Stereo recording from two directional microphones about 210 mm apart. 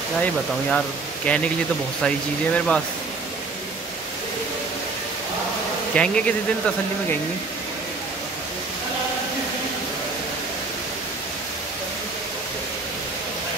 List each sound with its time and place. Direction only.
0.2 s speech: 5° left (ahead or behind)
5.9 s speech: 5° left (ahead or behind)